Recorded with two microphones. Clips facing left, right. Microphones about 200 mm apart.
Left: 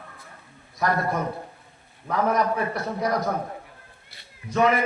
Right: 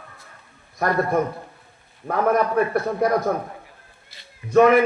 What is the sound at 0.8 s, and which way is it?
Speech, 55° right (ahead or behind).